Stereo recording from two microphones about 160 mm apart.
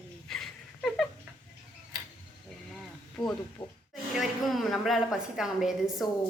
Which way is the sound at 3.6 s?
35° left (ahead or behind).